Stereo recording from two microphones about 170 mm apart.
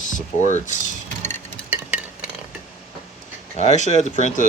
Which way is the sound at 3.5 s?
40° left (ahead or behind).